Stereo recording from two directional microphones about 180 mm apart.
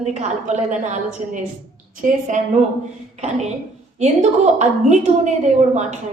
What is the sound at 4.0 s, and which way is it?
A woman's voice, 40° right (ahead or behind).